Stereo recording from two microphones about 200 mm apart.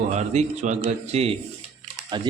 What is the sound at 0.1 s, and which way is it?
Speech, 35° right (ahead or behind).